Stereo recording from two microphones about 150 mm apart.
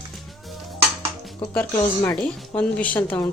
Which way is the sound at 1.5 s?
15° left (ahead or behind).